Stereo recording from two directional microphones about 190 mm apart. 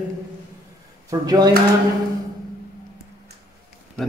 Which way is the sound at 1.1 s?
20° right (ahead or behind).